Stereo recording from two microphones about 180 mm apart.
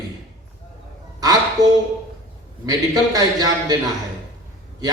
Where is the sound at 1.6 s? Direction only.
20° right (ahead or behind).